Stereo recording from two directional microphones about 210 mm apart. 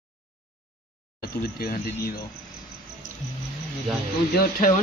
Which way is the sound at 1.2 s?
45° left (ahead or behind).